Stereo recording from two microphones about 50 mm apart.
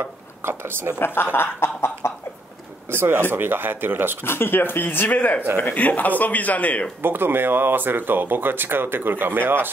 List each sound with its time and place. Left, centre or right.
0.4 s speech: right
0.9 s speech: left
3.0 s speech: right
4.2 s a man's voice: left
7.0 s speech: right